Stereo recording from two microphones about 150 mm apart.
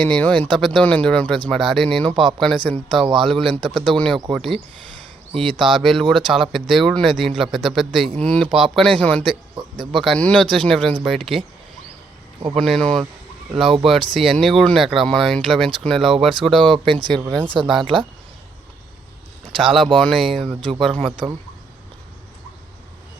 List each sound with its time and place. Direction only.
0.0 s speech: 10° left (ahead or behind)
9.6 s speech: 30° right (ahead or behind)
9.9 s speech: centre (ahead or behind)
12.5 s speech: 5° left (ahead or behind)
16.7 s speech: 35° right (ahead or behind)
19.5 s speech: centre (ahead or behind)
20.6 s speech: 35° right (ahead or behind)